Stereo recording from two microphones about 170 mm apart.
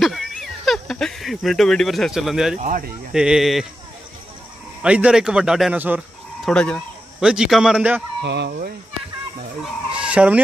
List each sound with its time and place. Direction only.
0.0 s a man's voice: centre (ahead or behind)
4.8 s a man's voice: 5° right (ahead or behind)
6.4 s a sound: 5° left (ahead or behind)
7.2 s a man's voice: 5° right (ahead or behind)
8.2 s speech: 85° right
9.6 s fowl: 5° right (ahead or behind)